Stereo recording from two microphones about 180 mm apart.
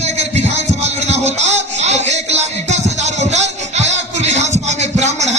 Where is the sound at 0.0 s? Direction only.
40° right (ahead or behind).